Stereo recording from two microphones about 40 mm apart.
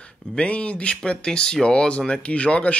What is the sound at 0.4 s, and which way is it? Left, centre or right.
Speech, left.